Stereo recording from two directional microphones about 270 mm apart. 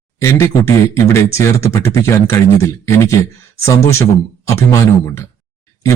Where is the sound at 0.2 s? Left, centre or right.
Centre.